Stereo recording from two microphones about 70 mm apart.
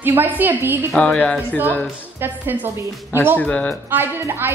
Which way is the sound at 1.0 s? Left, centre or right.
Centre.